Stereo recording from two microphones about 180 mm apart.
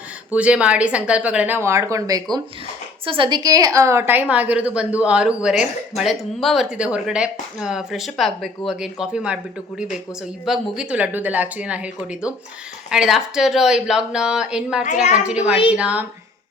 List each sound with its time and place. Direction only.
0.3 s a woman's voice: 5° right (ahead or behind)